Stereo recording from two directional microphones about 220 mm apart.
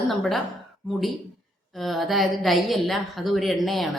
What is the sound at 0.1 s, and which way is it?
Speech, centre (ahead or behind).